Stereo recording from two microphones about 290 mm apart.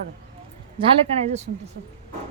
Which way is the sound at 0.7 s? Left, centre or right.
Right.